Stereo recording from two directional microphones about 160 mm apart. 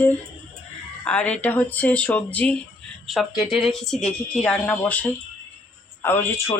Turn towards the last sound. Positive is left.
turn(degrees=15)  # may be behind; listen again after turning